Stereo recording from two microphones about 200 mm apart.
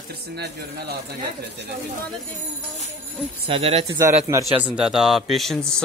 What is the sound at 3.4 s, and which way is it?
Speech, 30° right (ahead or behind).